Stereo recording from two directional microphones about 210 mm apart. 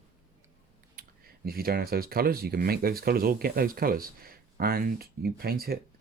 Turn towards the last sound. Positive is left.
turn(degrees=-45)  # may be behind; listen again after turning